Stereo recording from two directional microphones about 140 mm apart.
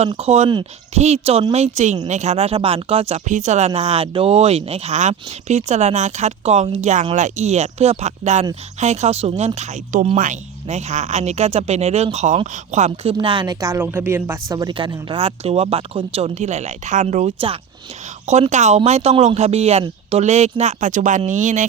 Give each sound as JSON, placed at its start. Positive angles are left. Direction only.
{"t": 0.1, "sound": "speech", "side_deg": -50}
{"t": 3.2, "sound": "speech", "side_deg": -60}
{"t": 3.7, "sound": "speech", "side_deg": -45}
{"t": 13.1, "sound": "speech", "side_deg": -35}
{"t": 14.8, "sound": "speech", "side_deg": -40}